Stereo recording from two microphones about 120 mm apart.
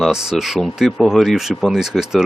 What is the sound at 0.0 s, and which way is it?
Speech, 5° right (ahead or behind).